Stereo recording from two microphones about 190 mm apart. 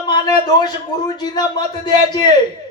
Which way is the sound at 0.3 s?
20° left (ahead or behind).